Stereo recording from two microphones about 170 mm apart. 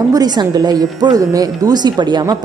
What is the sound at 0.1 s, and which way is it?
A woman's voice, 25° right (ahead or behind).